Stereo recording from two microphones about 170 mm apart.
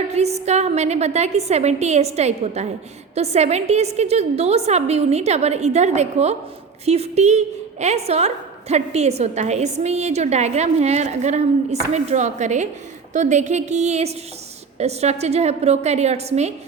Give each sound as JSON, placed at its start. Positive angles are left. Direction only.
{"t": 0.1, "sound": "a woman's voice", "side_deg": -40}